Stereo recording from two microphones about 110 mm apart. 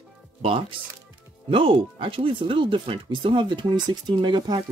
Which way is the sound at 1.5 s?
55° right (ahead or behind).